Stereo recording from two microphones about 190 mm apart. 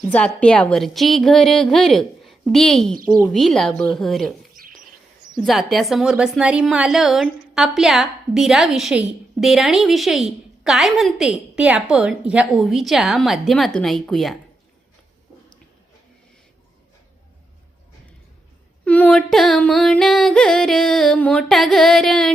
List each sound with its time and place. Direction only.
0.1 s a woman's voice: 5° left (ahead or behind)
4.5 s bird: 50° right (ahead or behind)
5.4 s a woman's voice: centre (ahead or behind)
18.9 s a woman's voice: 10° left (ahead or behind)